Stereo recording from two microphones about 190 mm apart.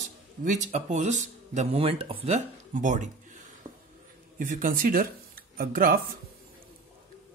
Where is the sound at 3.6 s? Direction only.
15° right (ahead or behind).